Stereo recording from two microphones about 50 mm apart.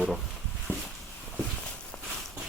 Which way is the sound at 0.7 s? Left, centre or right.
Right.